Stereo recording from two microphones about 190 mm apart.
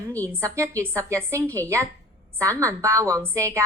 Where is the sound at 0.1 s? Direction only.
15° right (ahead or behind).